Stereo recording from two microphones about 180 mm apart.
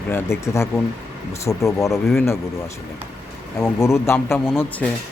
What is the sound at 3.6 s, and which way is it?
Speech, 15° left (ahead or behind).